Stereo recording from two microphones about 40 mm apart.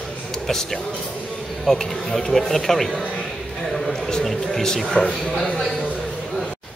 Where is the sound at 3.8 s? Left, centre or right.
Centre.